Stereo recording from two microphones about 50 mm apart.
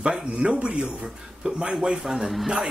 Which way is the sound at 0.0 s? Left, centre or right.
Centre.